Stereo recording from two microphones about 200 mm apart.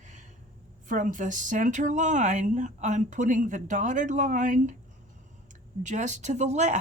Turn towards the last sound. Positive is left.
turn(degrees=-35)  # may be behind; listen again after turning